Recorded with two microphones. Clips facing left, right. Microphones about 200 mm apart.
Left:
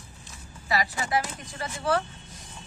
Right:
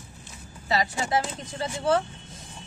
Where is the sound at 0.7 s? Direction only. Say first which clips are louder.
Right 2 dB; 25° right (ahead or behind).